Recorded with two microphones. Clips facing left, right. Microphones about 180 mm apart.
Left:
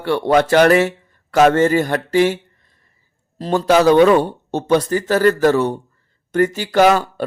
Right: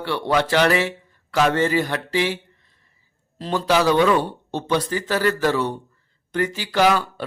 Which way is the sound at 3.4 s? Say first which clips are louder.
Left 6 dB; 45° left (ahead or behind).